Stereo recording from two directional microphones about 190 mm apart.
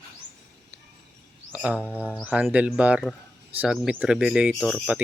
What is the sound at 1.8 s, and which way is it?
Speech, 10° left (ahead or behind).